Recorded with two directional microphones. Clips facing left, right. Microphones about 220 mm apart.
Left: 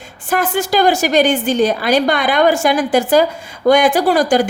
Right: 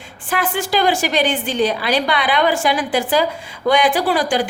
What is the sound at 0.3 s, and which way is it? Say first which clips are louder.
A woman's voice: left 4 dB; 45° left (ahead or behind).